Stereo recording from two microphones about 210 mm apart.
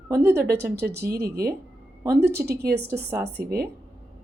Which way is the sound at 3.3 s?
50° right (ahead or behind).